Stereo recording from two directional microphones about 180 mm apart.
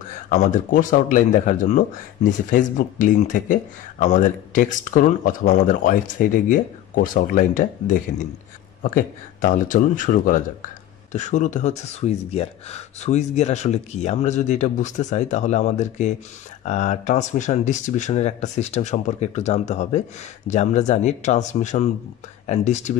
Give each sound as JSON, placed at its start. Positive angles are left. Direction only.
{"t": 0.3, "sound": "speech", "side_deg": 45}